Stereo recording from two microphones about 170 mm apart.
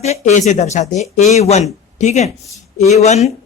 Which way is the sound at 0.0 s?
40° left (ahead or behind).